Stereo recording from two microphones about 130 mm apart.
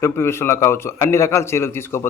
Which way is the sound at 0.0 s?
20° left (ahead or behind).